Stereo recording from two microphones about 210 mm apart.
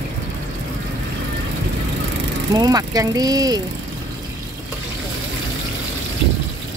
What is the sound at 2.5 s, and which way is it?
Speech, 15° right (ahead or behind).